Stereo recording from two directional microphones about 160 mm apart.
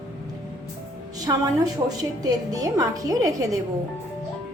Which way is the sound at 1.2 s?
25° right (ahead or behind).